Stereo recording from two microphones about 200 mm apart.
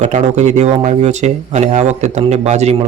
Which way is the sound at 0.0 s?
35° right (ahead or behind).